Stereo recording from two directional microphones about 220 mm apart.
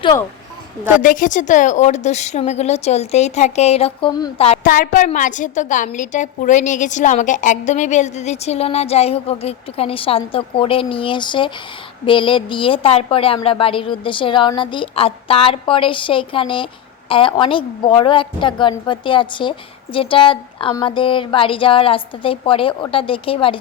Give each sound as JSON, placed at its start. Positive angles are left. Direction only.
{"t": 1.0, "sound": "a woman's voice", "side_deg": 35}
{"t": 4.7, "sound": "a woman's voice", "side_deg": 35}